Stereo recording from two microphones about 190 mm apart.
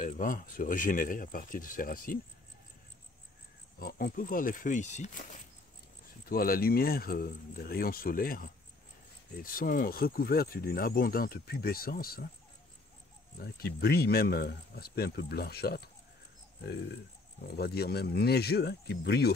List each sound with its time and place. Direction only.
0.0 s speech: 45° left (ahead or behind)
3.8 s speech: 50° left (ahead or behind)
6.2 s speech: 50° left (ahead or behind)
13.4 s speech: 55° left (ahead or behind)
17.4 s speech: 55° left (ahead or behind)